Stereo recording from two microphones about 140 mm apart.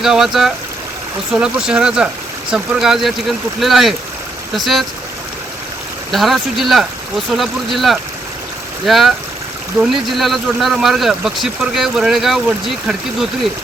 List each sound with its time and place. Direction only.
0.0 s speech: 5° right (ahead or behind)
1.6 s speech: 5° right (ahead or behind)
6.1 s speech: centre (ahead or behind)